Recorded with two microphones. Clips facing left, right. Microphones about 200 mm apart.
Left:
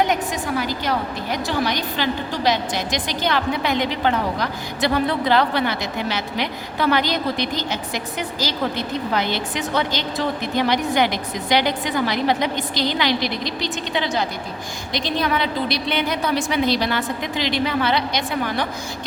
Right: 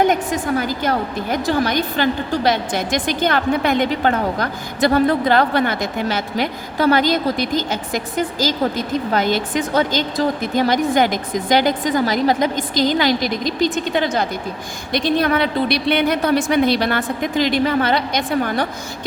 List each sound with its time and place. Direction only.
0.1 s a woman's voice: 50° right (ahead or behind)